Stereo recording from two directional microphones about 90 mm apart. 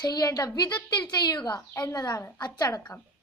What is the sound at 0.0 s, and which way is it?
A woman's voice, 50° left (ahead or behind).